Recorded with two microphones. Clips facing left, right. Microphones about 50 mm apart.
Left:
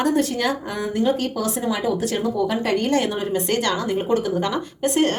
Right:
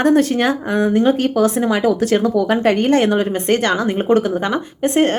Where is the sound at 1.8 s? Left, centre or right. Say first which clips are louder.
Right 8 dB; right.